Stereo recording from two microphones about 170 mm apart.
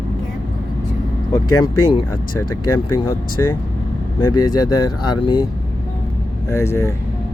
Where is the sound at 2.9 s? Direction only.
20° left (ahead or behind).